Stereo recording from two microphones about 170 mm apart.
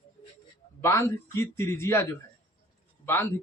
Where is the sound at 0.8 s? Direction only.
15° left (ahead or behind).